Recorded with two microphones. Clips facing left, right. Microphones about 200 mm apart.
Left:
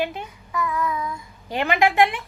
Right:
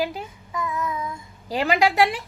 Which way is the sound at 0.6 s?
20° right (ahead or behind).